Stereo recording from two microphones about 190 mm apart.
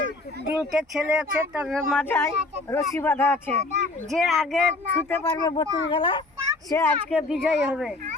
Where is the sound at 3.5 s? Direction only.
35° right (ahead or behind).